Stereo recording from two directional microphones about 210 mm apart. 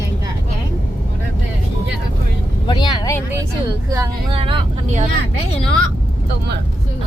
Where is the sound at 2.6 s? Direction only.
20° left (ahead or behind).